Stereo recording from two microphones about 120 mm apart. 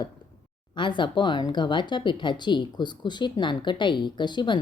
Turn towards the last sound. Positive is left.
turn(degrees=40)  # may be behind; listen again after turning